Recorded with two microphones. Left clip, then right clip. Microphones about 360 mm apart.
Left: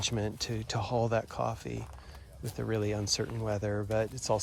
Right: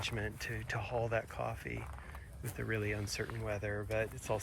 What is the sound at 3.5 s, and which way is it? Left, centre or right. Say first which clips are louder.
Speech: left 6 dB; left.